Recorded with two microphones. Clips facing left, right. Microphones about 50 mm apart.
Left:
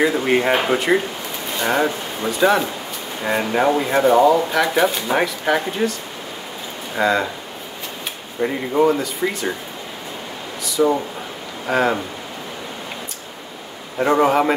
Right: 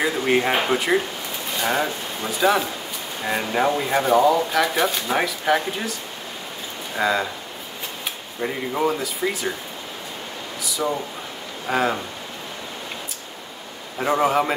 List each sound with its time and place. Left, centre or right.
0.0 s speech: centre
7.0 s speech: centre
8.4 s speech: centre
10.8 s speech: centre
14.0 s speech: centre